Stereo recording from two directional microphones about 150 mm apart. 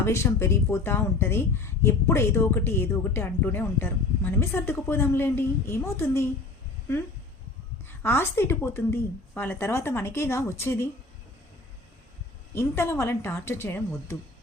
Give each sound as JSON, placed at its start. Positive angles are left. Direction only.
{"t": 0.0, "sound": "speech", "side_deg": 20}
{"t": 7.9, "sound": "speech", "side_deg": 15}
{"t": 12.5, "sound": "speech", "side_deg": 15}